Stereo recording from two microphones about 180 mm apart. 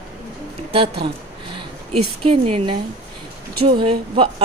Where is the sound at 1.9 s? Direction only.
30° right (ahead or behind).